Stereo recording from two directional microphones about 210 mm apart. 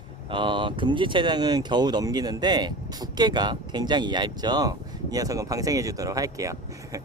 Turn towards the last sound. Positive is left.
turn(degrees=-15)  # may be behind; listen again after turning